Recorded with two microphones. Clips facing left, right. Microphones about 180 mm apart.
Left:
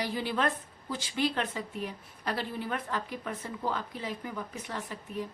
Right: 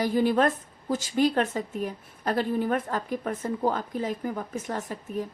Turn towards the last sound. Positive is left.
turn(degrees=-45)  # may be behind; listen again after turning